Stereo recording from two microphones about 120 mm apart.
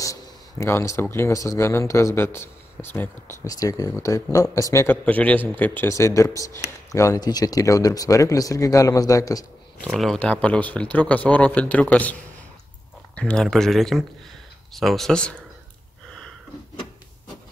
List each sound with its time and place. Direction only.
0.0 s speech: 25° left (ahead or behind)
3.4 s speech: 30° left (ahead or behind)
4.8 s a man's voice: 10° left (ahead or behind); by 9.5 s 30° left (ahead or behind)
9.8 s a man's voice: centre (ahead or behind)